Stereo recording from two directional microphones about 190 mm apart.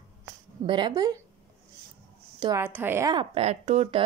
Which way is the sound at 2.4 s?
15° right (ahead or behind).